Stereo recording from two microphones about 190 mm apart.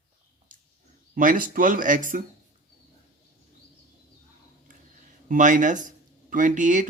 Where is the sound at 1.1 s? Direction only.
45° right (ahead or behind).